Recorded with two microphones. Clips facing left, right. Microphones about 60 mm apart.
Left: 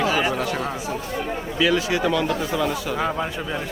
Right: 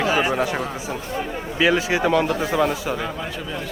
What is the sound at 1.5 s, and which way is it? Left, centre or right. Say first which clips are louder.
Speech: right 2 dB; right.